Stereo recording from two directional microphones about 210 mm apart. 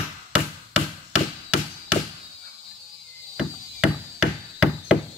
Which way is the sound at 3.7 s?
5° right (ahead or behind).